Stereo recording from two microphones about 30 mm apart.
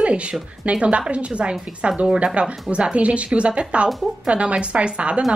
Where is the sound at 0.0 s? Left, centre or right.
Right.